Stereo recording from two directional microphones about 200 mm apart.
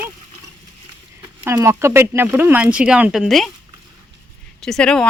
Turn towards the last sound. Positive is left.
turn(degrees=5)  # may be behind; listen again after turning